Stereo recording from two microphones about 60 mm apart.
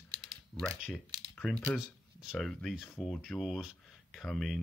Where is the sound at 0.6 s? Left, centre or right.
Centre.